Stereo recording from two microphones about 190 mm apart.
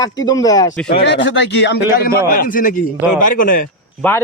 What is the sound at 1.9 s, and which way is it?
Speech, 50° left (ahead or behind).